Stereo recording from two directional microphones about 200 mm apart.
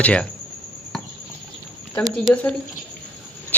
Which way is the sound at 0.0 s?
5° left (ahead or behind).